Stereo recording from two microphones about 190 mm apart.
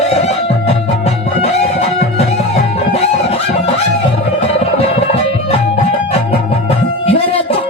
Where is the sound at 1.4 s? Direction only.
35° left (ahead or behind).